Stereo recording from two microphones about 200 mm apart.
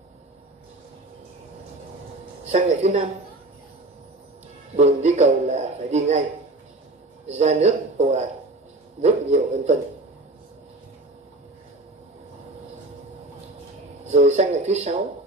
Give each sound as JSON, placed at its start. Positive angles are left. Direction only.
{"t": 2.5, "sound": "speech", "side_deg": -35}
{"t": 4.7, "sound": "speech", "side_deg": -35}
{"t": 7.2, "sound": "a man's voice", "side_deg": -35}
{"t": 14.1, "sound": "speech", "side_deg": -35}